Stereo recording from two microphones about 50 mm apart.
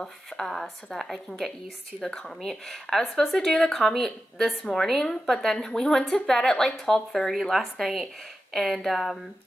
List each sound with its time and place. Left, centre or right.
0.0 s speech: centre